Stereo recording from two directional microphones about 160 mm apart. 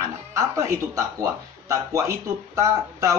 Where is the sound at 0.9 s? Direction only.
20° right (ahead or behind).